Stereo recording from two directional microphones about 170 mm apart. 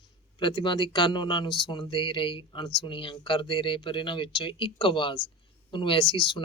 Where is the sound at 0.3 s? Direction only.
30° left (ahead or behind).